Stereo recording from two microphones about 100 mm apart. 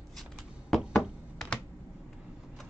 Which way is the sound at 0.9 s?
Centre (ahead or behind).